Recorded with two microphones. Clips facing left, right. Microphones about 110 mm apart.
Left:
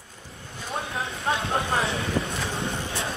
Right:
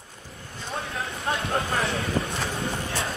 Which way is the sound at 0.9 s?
25° left (ahead or behind).